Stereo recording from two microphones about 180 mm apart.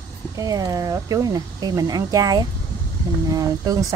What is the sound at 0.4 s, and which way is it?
Speech, 20° right (ahead or behind).